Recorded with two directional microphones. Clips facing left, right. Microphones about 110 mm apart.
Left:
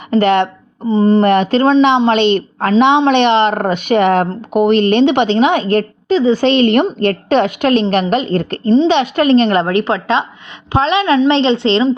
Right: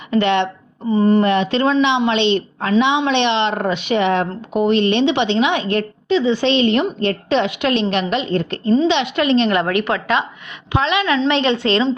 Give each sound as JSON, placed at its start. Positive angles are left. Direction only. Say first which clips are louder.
{"t": 0.1, "sound": "speech", "louder": "left 4 dB", "side_deg": 45}
{"t": 0.9, "sound": "a woman's voice", "louder": "left 3 dB", "side_deg": 30}
{"t": 1.2, "sound": "a woman's voice", "louder": "left 5 dB", "side_deg": 50}